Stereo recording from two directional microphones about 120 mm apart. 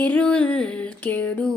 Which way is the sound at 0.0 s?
10° left (ahead or behind).